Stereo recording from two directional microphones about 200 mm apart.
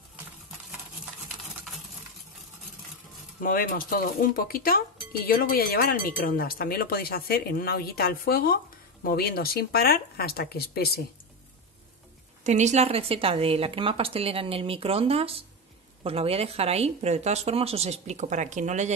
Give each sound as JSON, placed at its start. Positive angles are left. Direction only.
{"t": 3.4, "sound": "speech", "side_deg": 45}
{"t": 12.4, "sound": "a woman's voice", "side_deg": -35}